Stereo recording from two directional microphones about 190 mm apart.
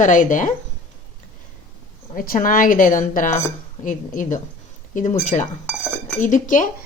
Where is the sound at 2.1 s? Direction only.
50° left (ahead or behind).